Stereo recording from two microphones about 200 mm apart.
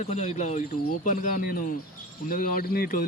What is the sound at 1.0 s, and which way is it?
Speech, 40° left (ahead or behind).